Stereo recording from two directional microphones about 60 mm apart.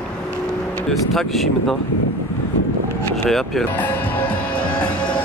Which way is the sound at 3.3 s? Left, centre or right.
Centre.